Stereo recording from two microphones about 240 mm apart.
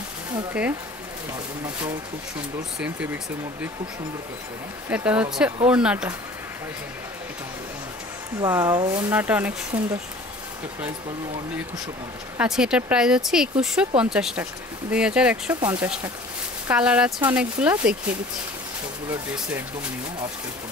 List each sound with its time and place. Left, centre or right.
0.3 s speech: centre
4.8 s speech: centre
8.4 s speech: centre
12.4 s speech: centre
19.0 s speech: centre